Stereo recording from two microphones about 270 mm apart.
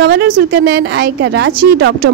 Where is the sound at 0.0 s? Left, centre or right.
Right.